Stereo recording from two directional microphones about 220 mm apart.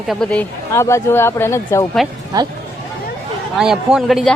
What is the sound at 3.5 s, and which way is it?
Speech, centre (ahead or behind).